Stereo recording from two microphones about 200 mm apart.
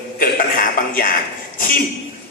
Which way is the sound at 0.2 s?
45° left (ahead or behind).